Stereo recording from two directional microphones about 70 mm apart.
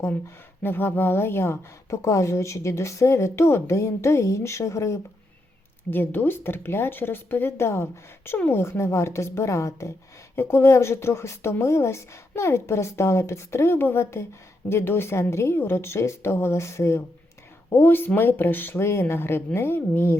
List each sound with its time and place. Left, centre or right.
0.6 s a woman's voice: left
5.9 s speech: left
17.7 s speech: left